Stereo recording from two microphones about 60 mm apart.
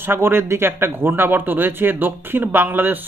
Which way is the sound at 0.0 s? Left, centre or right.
Right.